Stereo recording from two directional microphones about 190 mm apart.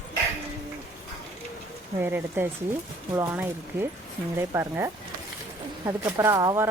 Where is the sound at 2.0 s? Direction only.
10° right (ahead or behind).